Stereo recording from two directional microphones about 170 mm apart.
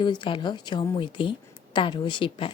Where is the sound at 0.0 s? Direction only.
25° left (ahead or behind).